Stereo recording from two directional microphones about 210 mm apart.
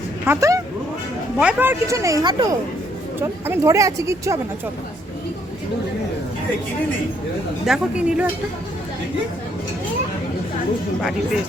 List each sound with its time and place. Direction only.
0.3 s speech: 15° right (ahead or behind)
7.6 s speech: 5° right (ahead or behind)